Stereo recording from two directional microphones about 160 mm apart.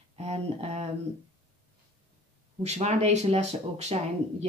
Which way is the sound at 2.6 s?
45° right (ahead or behind).